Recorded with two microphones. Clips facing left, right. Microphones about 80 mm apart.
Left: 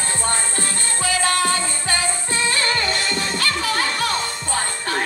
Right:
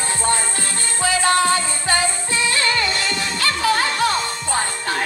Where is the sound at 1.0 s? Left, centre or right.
Right.